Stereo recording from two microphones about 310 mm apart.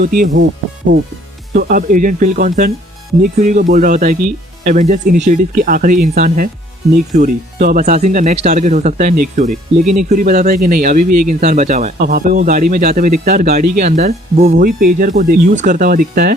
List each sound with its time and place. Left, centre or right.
0.0 s speech: right
1.5 s speech: right
11.0 s speech: right
11.3 s speech: right